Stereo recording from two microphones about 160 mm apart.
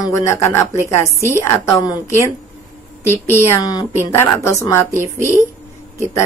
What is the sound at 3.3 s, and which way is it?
A woman's voice, 25° left (ahead or behind).